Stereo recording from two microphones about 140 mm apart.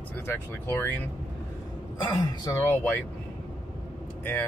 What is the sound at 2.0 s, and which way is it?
Speech, 30° left (ahead or behind).